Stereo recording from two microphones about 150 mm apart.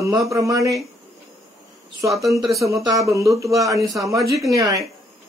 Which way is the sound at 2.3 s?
20° right (ahead or behind).